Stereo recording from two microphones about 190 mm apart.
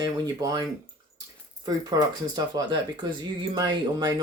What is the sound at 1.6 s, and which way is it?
Speech, 20° right (ahead or behind).